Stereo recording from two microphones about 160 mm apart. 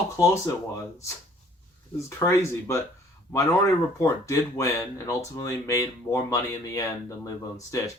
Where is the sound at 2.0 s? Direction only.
15° left (ahead or behind).